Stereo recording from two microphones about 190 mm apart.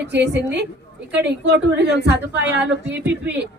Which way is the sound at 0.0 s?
60° right (ahead or behind).